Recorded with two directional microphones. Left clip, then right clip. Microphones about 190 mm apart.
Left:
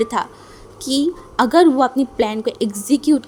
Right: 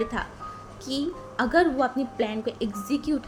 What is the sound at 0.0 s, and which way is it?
A woman's voice, 50° left (ahead or behind).